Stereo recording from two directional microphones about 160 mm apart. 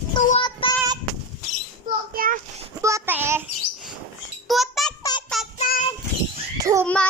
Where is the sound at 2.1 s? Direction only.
60° right (ahead or behind).